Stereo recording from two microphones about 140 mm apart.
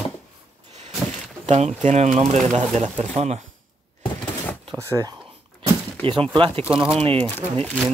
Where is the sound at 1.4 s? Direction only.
50° right (ahead or behind).